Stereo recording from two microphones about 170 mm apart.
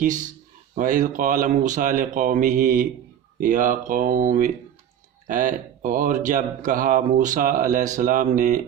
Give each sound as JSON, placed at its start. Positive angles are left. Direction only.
{"t": 0.0, "sound": "speech", "side_deg": -50}